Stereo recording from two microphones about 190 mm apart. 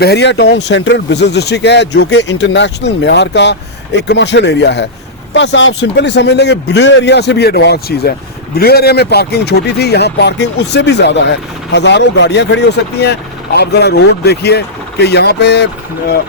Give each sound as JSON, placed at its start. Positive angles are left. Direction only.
{"t": 0.0, "sound": "speech", "side_deg": 60}